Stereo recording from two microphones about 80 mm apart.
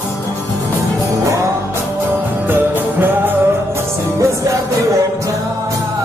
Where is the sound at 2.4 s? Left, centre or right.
Right.